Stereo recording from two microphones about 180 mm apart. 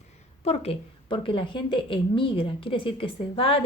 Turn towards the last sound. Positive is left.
turn(degrees=30)  # may be behind; listen again after turning